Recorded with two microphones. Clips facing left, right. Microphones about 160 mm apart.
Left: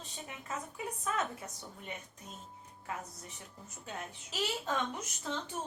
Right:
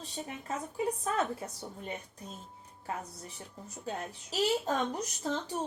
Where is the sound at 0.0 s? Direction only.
35° right (ahead or behind).